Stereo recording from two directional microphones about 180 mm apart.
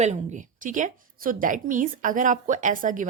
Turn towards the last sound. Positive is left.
turn(degrees=-45)  # may be behind; listen again after turning